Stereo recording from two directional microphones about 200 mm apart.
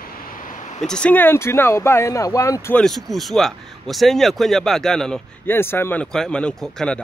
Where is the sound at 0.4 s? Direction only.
40° left (ahead or behind).